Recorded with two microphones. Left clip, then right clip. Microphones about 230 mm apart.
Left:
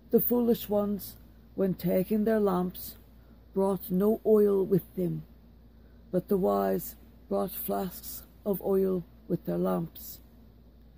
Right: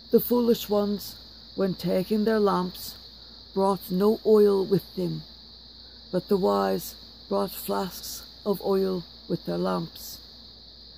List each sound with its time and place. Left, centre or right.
0.1 s speech: right
6.1 s speech: right